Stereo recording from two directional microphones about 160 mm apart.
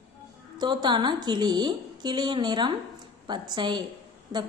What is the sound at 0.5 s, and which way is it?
A woman's voice, 25° right (ahead or behind).